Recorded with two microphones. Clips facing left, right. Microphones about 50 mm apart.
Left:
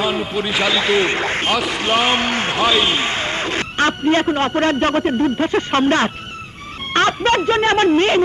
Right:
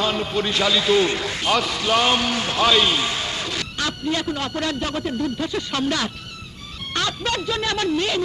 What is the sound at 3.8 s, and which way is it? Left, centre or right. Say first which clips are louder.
A man's voice: left 9 dB; left.